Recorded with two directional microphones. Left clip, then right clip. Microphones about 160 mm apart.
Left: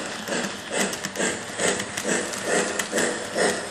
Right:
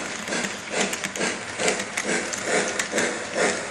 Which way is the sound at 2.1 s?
20° left (ahead or behind).